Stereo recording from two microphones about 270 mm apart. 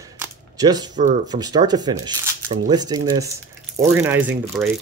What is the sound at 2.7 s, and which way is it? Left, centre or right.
Speech, centre.